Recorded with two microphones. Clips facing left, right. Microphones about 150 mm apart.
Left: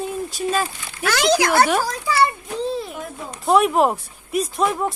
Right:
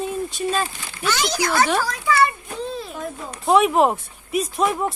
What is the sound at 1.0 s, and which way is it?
Speech, 90° left.